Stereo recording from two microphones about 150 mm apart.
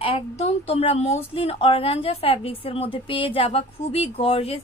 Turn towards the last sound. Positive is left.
turn(degrees=40)  # may be behind; listen again after turning